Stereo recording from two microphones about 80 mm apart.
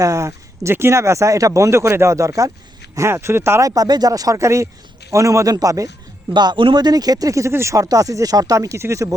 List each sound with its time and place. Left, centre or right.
0.0 s speech: right
3.6 s speech: right
6.3 s speech: right